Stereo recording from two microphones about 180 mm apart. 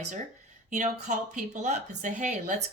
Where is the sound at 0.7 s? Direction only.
45° right (ahead or behind).